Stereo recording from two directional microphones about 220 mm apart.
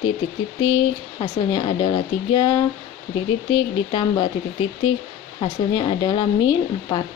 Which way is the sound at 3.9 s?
20° left (ahead or behind).